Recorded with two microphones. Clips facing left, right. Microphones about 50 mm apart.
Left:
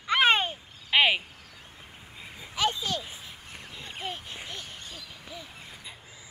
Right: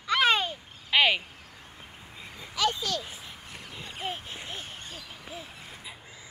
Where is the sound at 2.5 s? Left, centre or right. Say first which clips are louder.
Even; left.